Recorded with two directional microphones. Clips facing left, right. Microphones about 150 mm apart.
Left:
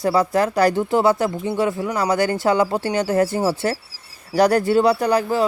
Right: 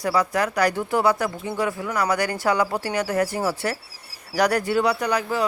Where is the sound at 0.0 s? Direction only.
25° left (ahead or behind).